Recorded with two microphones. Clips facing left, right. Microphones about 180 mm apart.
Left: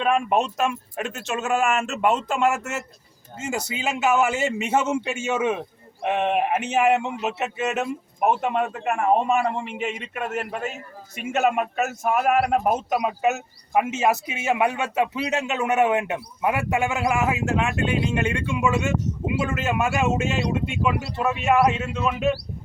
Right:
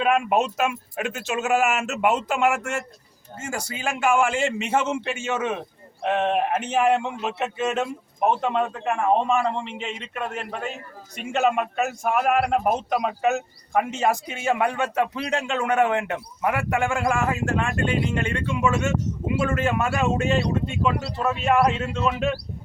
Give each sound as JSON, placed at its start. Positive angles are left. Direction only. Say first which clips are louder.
{"t": 0.0, "sound": "speech", "louder": "even", "side_deg": -5}
{"t": 3.5, "sound": "speech", "louder": "left 3 dB", "side_deg": 25}
{"t": 3.8, "sound": "a man's voice", "louder": "even", "side_deg": 5}